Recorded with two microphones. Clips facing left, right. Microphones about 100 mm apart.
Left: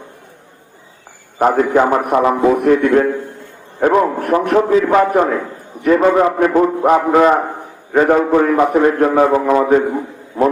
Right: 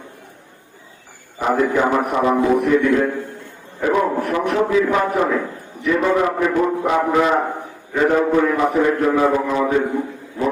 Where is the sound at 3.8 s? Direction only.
50° left (ahead or behind).